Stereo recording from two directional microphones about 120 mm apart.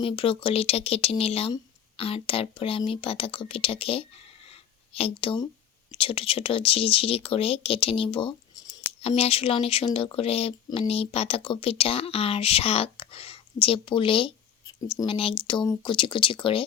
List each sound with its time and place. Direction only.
0.0 s speech: 50° left (ahead or behind)